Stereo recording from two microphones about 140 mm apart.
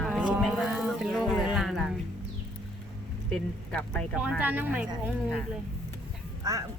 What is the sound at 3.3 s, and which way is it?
Speech, 10° left (ahead or behind).